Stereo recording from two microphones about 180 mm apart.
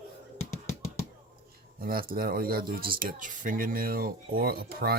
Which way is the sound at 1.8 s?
55° right (ahead or behind).